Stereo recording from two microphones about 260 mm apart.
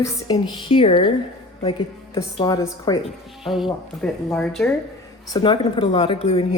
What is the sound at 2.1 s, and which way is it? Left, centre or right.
Speech, centre.